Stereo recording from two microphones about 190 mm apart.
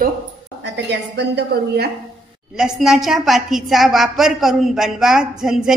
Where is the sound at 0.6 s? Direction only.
65° right (ahead or behind).